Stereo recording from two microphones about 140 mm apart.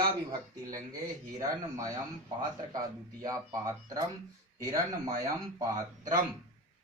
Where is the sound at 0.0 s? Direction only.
25° right (ahead or behind).